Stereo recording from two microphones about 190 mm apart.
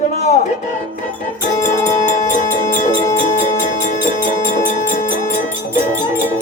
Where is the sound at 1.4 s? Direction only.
40° left (ahead or behind).